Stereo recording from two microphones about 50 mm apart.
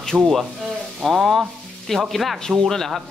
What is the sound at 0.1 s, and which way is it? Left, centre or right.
Speech, right.